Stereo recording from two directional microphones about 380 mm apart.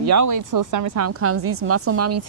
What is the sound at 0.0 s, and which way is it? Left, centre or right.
Speech, right.